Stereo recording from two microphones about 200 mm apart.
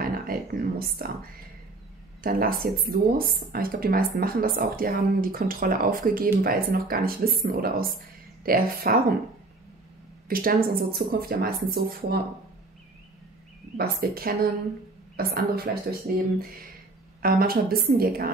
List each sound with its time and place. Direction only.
0.0 s a sound: 45° right (ahead or behind)
2.2 s speech: 45° right (ahead or behind)
10.2 s speech: 45° right (ahead or behind)
13.7 s speech: 50° right (ahead or behind)